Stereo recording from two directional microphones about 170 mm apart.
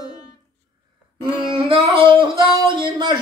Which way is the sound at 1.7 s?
30° right (ahead or behind).